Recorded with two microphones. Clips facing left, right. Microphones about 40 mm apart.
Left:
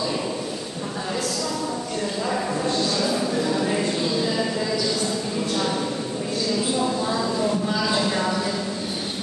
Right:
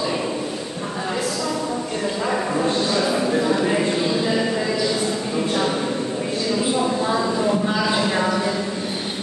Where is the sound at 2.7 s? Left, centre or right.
Right.